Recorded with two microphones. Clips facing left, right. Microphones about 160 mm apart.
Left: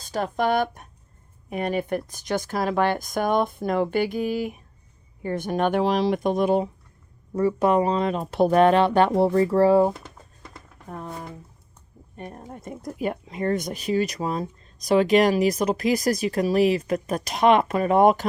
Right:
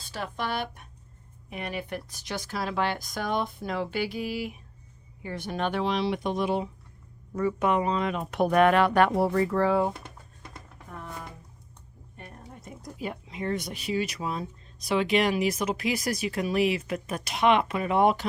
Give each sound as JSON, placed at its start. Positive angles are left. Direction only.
{"t": 0.0, "sound": "speech", "side_deg": 45}
{"t": 7.3, "sound": "speech", "side_deg": 35}
{"t": 10.8, "sound": "a sound", "side_deg": 35}
{"t": 12.3, "sound": "speech", "side_deg": 55}